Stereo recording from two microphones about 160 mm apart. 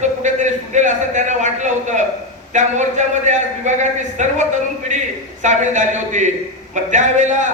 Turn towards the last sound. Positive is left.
turn(degrees=-50)  # may be behind; listen again after turning